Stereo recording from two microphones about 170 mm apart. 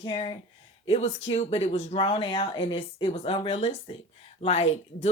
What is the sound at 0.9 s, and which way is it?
Speech, 40° left (ahead or behind).